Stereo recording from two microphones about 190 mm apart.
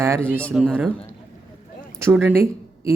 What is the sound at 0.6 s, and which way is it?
Speech, 5° right (ahead or behind).